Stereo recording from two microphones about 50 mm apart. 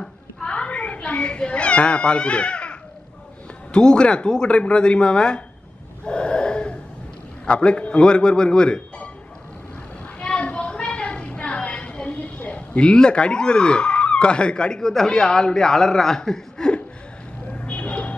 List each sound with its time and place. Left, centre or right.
0.0 s cat: centre
3.7 s speech: centre
6.0 s wheeze: centre
7.4 s speech: left
10.1 s a sound: left
17.5 s a sound: left